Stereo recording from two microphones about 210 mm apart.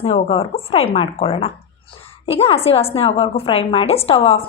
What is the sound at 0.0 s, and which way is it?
A woman's voice, 30° left (ahead or behind).